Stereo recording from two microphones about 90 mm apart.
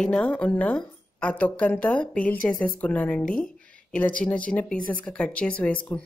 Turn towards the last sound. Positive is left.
turn(degrees=15)  # may be behind; listen again after turning